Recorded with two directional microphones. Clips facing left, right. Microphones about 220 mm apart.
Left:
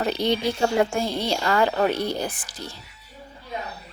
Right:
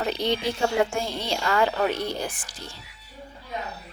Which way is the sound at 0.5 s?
35° left (ahead or behind).